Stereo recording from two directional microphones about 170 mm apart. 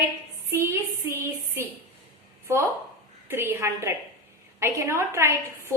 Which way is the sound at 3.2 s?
15° right (ahead or behind).